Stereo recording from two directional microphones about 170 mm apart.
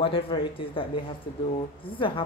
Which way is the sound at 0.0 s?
30° left (ahead or behind).